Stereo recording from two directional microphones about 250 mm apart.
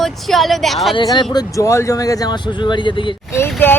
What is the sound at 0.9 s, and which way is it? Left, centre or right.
Speech, centre.